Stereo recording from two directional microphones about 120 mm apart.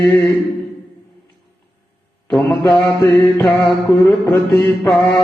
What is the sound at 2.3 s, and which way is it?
Mantra, centre (ahead or behind).